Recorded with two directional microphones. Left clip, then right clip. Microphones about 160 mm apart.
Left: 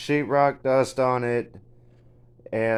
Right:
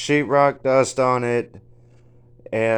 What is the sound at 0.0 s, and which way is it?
Speech, 20° right (ahead or behind).